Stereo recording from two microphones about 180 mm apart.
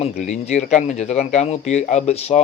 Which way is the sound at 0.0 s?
40° left (ahead or behind).